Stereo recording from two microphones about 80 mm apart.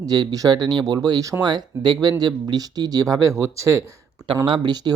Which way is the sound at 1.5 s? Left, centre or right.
Right.